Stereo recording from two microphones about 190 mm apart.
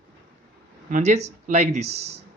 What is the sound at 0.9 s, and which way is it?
Speech, 40° right (ahead or behind).